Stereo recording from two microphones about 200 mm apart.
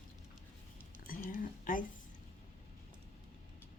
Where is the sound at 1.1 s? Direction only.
45° left (ahead or behind).